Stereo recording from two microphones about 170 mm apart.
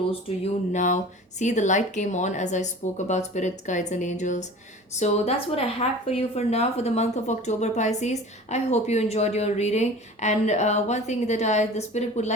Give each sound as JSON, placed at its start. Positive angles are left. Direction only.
{"t": 0.7, "sound": "a woman's voice", "side_deg": 45}